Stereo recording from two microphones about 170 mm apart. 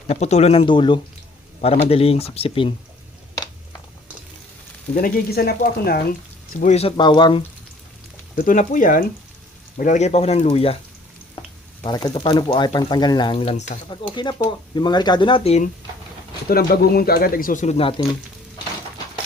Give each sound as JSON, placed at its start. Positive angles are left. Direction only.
{"t": 0.1, "sound": "speech", "side_deg": 40}
{"t": 4.9, "sound": "speech", "side_deg": 55}
{"t": 6.7, "sound": "speech", "side_deg": 30}
{"t": 8.4, "sound": "speech", "side_deg": 50}
{"t": 11.9, "sound": "speech", "side_deg": 25}
{"t": 13.9, "sound": "speech", "side_deg": 30}
{"t": 16.5, "sound": "speech", "side_deg": 65}